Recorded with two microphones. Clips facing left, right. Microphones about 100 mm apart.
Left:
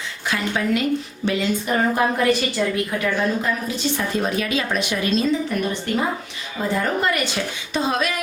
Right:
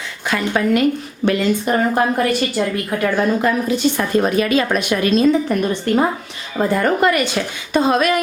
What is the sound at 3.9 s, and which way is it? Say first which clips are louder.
A woman's voice: right 6 dB; 60° right (ahead or behind).